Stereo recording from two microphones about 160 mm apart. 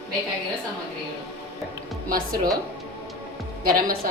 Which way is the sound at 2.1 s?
65° right (ahead or behind).